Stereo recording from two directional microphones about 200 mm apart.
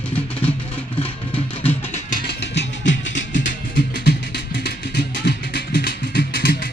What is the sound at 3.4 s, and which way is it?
Music, 50° left (ahead or behind).